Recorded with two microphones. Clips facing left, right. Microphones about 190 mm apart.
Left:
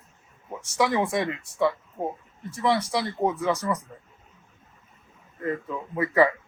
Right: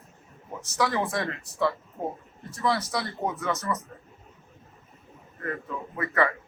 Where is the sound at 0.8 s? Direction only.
20° left (ahead or behind).